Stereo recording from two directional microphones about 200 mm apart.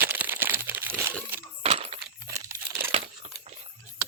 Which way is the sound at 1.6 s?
30° right (ahead or behind).